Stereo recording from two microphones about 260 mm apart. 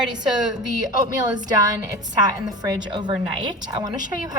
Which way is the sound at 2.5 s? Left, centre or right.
Centre.